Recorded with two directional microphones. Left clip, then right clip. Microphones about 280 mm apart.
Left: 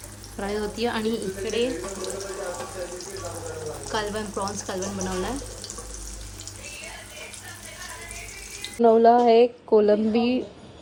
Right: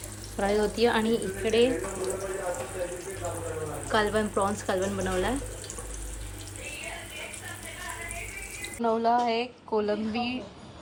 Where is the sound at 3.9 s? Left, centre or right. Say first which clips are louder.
Right 3 dB; centre.